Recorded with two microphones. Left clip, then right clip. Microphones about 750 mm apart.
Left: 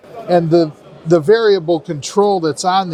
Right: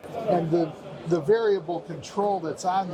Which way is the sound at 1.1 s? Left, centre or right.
Left.